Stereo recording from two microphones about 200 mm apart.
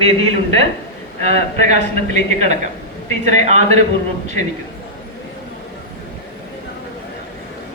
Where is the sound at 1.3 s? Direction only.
35° right (ahead or behind).